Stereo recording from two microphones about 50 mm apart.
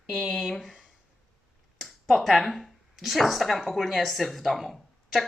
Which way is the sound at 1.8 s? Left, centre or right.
Centre.